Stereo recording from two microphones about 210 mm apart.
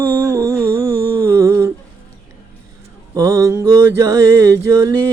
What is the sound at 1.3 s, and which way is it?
Humming, 10° right (ahead or behind).